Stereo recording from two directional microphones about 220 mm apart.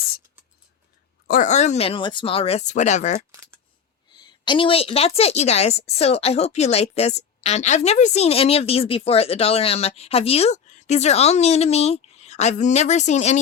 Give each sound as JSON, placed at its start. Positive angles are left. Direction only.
{"t": 1.3, "sound": "a woman's voice", "side_deg": 35}
{"t": 4.1, "sound": "a woman's voice", "side_deg": 20}